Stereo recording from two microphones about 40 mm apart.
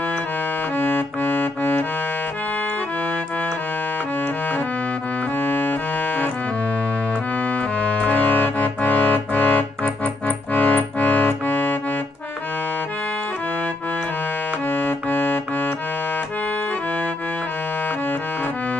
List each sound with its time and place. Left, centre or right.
0.7 s music: left
5.4 s music: left
7.8 s music: left
14.7 s music: left